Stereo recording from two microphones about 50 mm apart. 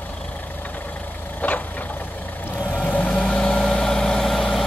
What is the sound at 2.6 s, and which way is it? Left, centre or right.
Vehicle, left.